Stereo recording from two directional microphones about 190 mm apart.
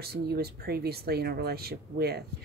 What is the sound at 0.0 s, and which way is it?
Speech, 55° right (ahead or behind).